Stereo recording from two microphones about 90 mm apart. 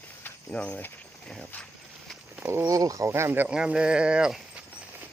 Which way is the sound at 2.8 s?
40° right (ahead or behind).